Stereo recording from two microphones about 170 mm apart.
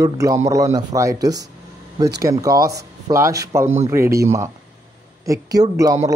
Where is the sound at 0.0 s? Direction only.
20° right (ahead or behind).